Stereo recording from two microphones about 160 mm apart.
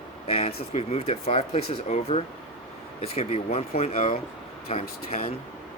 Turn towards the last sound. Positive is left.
turn(degrees=40)  # may be behind; listen again after turning